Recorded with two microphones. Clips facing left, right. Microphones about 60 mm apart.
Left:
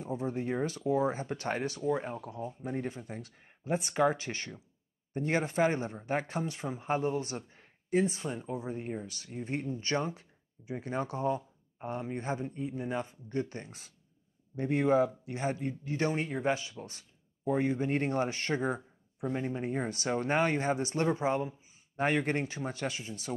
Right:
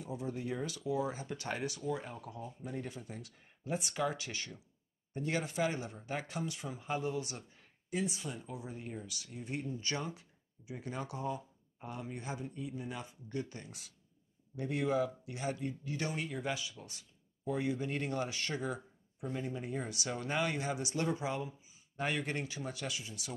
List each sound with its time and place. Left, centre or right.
0.0 s speech: left